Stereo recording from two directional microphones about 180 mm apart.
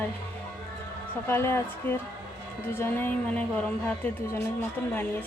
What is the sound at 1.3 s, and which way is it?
A woman's voice, 15° left (ahead or behind).